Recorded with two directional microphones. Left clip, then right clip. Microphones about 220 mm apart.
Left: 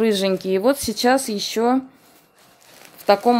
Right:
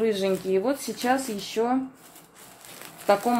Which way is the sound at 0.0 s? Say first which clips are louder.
Left 5 dB; 50° left (ahead or behind).